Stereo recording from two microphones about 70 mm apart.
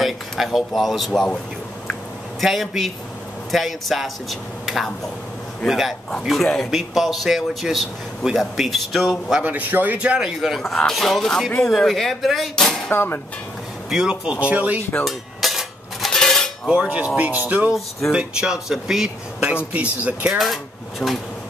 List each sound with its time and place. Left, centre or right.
0.0 s a man's voice: centre
2.4 s a man's voice: centre
9.4 s a man's voice: right; by 10.6 s centre
10.6 s a man's voice: centre
12.9 s speech: left
13.8 s speech: centre
15.0 s cutlery: centre
16.6 s a man's voice: centre
18.1 s speech: centre
19.4 s a man's voice: centre
21.0 s speech: centre